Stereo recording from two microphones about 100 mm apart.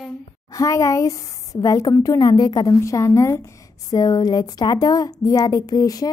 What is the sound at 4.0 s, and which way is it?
A woman's voice, 40° left (ahead or behind).